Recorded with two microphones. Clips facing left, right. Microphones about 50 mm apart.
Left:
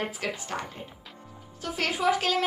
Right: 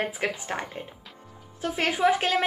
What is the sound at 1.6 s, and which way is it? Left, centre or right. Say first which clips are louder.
Speech: right 4 dB; right.